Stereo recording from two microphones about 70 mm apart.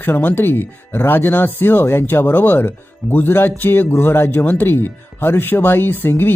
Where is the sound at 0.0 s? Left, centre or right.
Left.